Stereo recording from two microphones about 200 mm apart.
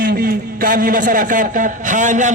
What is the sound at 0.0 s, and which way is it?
A man's voice, 50° right (ahead or behind).